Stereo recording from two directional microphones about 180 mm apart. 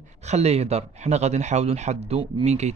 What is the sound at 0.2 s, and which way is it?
Speech, 35° right (ahead or behind).